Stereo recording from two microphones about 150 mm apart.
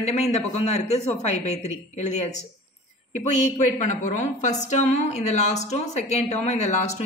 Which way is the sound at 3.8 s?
55° left (ahead or behind).